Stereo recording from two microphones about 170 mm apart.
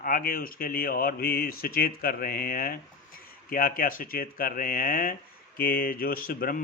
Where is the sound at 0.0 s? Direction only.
55° left (ahead or behind).